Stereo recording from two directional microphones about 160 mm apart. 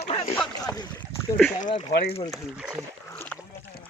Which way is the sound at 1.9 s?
80° left.